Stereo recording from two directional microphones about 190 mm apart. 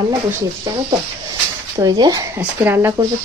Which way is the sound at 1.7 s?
20° right (ahead or behind).